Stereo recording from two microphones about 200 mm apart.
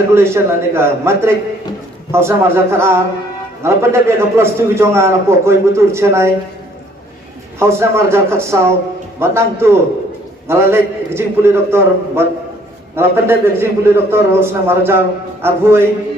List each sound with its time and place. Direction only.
0.1 s a man's voice: 15° right (ahead or behind)
7.6 s a man's voice: 15° right (ahead or behind)